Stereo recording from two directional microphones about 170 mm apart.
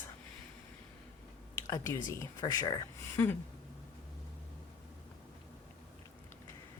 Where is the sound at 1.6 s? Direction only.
20° left (ahead or behind).